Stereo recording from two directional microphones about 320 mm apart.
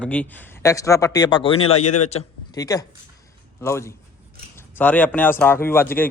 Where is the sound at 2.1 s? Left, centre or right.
Centre.